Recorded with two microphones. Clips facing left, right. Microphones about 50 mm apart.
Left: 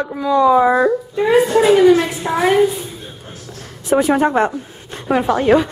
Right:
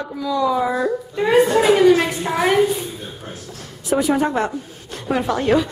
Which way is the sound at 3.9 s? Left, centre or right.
Left.